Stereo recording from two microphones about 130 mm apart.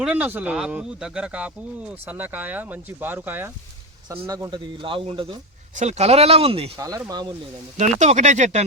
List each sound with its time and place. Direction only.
0.0 s speech: 10° right (ahead or behind)
4.3 s speech: 30° right (ahead or behind)
4.8 s speech: 40° right (ahead or behind)
5.7 s speech: 60° right (ahead or behind)
6.7 s speech: 25° right (ahead or behind)
7.8 s speech: 65° right (ahead or behind)